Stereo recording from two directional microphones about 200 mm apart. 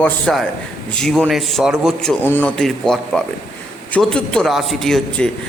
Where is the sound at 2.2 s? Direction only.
10° left (ahead or behind).